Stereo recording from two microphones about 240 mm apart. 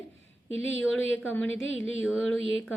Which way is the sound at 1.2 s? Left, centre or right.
Centre.